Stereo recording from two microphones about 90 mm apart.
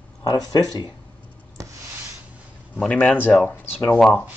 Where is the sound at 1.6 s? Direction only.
40° right (ahead or behind).